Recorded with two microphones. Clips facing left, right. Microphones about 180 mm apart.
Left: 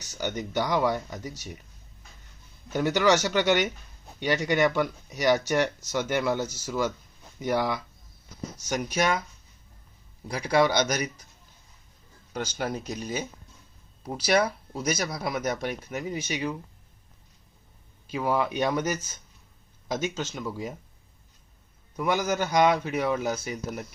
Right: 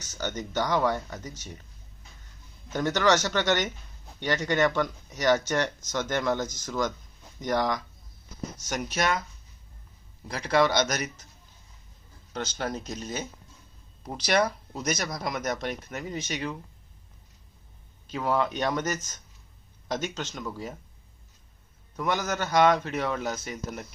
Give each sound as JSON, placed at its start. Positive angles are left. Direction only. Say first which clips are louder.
{"t": 0.0, "sound": "speech", "louder": "left 2 dB", "side_deg": 10}
{"t": 2.6, "sound": "speech", "louder": "left 1 dB", "side_deg": 10}
{"t": 10.2, "sound": "speech", "louder": "left 1 dB", "side_deg": 10}
{"t": 12.3, "sound": "speech", "louder": "left 1 dB", "side_deg": 10}
{"t": 18.1, "sound": "speech", "louder": "left 1 dB", "side_deg": 10}
{"t": 21.9, "sound": "speech", "louder": "left 3 dB", "side_deg": 10}